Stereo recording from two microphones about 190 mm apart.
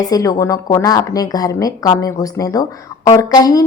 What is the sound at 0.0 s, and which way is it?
Speech, 20° left (ahead or behind).